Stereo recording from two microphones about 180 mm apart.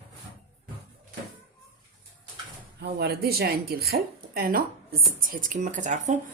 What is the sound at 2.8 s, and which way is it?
A woman's voice, 65° right (ahead or behind).